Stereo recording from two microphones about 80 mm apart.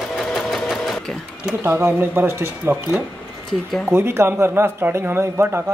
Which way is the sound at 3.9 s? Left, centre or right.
Right.